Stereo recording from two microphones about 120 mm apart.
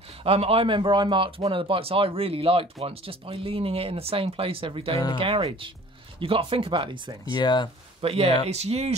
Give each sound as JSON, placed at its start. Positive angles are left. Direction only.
{"t": 0.2, "sound": "speech", "side_deg": -55}
{"t": 7.3, "sound": "speech", "side_deg": 35}
{"t": 8.0, "sound": "speech", "side_deg": -55}